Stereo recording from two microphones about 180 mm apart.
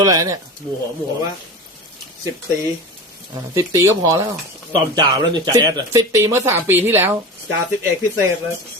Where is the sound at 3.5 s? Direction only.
20° right (ahead or behind).